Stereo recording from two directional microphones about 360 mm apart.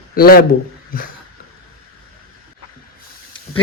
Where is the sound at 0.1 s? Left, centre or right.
Left.